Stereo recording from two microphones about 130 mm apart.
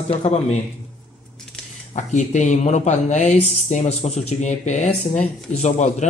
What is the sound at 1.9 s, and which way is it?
Speech, 65° left (ahead or behind).